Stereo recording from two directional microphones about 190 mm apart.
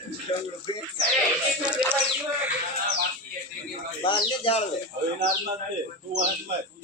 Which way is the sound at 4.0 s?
30° left (ahead or behind).